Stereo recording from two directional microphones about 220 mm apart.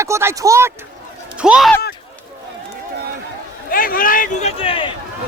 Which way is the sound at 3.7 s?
40° left (ahead or behind).